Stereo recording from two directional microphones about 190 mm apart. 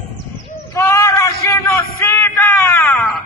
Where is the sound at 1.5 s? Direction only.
15° left (ahead or behind).